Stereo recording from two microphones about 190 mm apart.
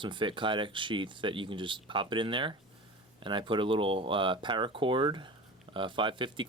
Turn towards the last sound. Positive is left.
turn(degrees=-25)  # may be behind; listen again after turning